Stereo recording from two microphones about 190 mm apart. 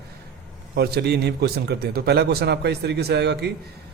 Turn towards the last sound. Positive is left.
turn(degrees=-60)  # may be behind; listen again after turning